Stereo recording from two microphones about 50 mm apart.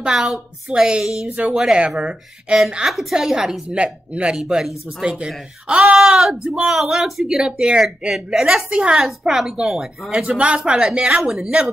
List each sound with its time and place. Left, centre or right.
0.1 s a woman's voice: centre
0.7 s speech: centre
1.3 s speech: right
1.9 s speech: centre
2.9 s a woman's voice: centre
3.7 s speech: right
4.4 s speech: centre
5.0 s speech: centre
7.2 s speech: centre
8.6 s speech: centre
10.2 s speech: right